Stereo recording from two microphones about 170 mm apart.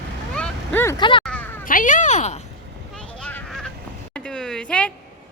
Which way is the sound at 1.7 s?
50° left (ahead or behind).